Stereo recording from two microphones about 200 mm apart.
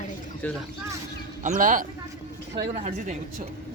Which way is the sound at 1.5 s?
40° right (ahead or behind).